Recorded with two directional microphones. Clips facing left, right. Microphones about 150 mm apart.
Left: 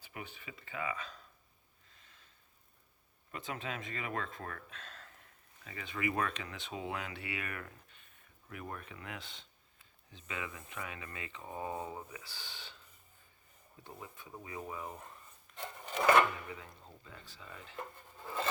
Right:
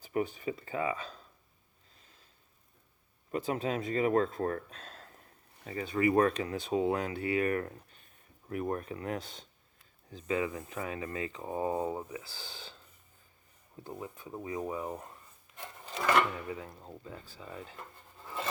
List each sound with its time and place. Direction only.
0.0 s speech: 40° right (ahead or behind)
2.0 s a sound: 35° right (ahead or behind)
3.3 s speech: 35° right (ahead or behind)
13.8 s speech: 30° right (ahead or behind)
15.6 s wood: 15° left (ahead or behind)
16.5 s speech: 35° right (ahead or behind)